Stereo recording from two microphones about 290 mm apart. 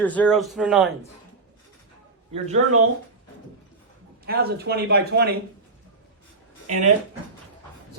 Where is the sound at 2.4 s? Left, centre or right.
Right.